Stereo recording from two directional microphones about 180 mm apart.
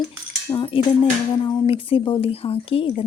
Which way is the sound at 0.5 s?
30° left (ahead or behind).